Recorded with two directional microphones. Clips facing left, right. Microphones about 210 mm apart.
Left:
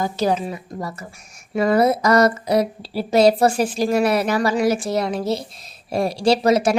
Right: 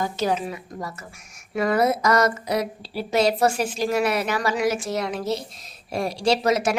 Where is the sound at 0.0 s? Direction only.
35° left (ahead or behind).